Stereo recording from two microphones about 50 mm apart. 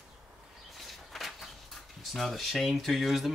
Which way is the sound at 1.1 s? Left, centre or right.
Centre.